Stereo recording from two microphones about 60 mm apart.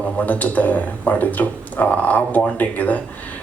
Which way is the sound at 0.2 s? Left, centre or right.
Left.